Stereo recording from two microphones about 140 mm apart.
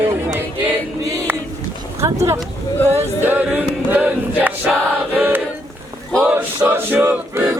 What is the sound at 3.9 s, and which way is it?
Music, 10° right (ahead or behind).